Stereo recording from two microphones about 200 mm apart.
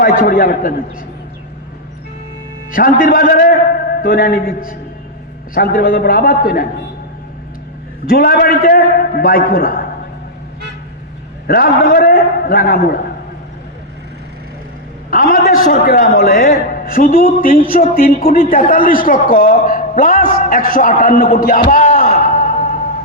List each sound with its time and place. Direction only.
0.0 s a man's voice: 45° left (ahead or behind)
2.7 s a man's voice: 45° left (ahead or behind)
8.0 s a man's voice: 50° left (ahead or behind)
11.4 s a man's voice: 50° left (ahead or behind)
15.1 s a man's voice: 45° left (ahead or behind)
22.1 s a sound: 40° left (ahead or behind)